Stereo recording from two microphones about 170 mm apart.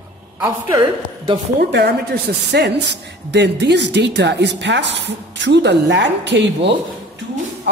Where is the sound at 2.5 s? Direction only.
90° right.